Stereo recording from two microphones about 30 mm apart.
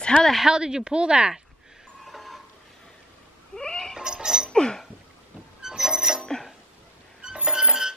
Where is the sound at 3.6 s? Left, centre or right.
Left.